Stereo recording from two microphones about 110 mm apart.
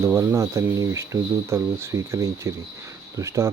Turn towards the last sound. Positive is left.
turn(degrees=-25)  # may be behind; listen again after turning